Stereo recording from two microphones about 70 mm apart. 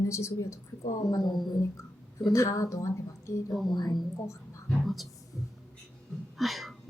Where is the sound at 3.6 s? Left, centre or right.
Left.